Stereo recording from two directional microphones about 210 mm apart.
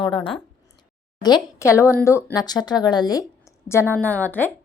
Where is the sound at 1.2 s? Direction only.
15° left (ahead or behind).